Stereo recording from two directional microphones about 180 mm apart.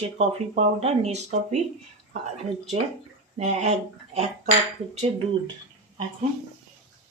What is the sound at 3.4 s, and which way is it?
Speech, 40° right (ahead or behind).